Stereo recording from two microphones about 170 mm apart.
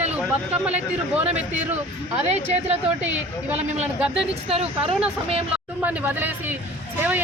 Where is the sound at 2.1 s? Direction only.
40° right (ahead or behind).